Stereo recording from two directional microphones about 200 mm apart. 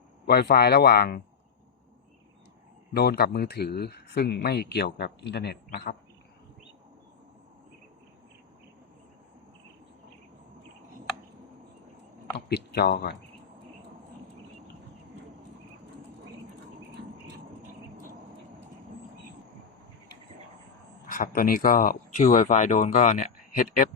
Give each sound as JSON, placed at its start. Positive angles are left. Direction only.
{"t": 0.3, "sound": "speech", "side_deg": 50}
{"t": 2.9, "sound": "speech", "side_deg": 55}
{"t": 12.5, "sound": "speech", "side_deg": 55}
{"t": 21.1, "sound": "speech", "side_deg": 45}